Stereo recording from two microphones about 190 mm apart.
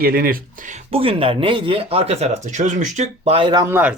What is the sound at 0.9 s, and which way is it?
Speech, 30° right (ahead or behind).